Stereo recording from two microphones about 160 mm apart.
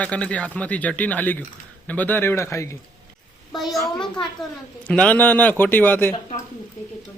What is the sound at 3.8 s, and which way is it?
Speech, 30° left (ahead or behind).